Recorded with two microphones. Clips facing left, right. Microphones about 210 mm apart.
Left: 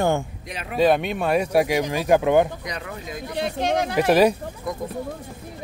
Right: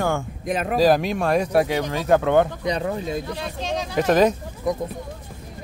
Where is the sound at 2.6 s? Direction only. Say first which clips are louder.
Right 9 dB; 30° right (ahead or behind).